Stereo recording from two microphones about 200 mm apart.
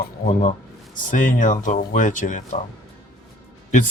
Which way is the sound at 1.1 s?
40° left (ahead or behind).